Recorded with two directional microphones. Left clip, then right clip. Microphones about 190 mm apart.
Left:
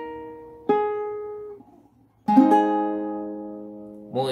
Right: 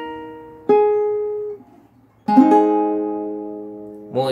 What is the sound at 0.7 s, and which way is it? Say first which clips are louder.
Music: right 8 dB; 35° left (ahead or behind).